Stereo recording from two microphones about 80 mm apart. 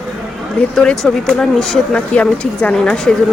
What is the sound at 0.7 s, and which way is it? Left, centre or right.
Speech, centre.